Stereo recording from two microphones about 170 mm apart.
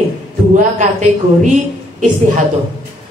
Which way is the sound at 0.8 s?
50° right (ahead or behind).